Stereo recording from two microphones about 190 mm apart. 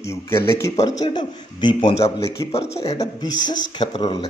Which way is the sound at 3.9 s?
35° left (ahead or behind).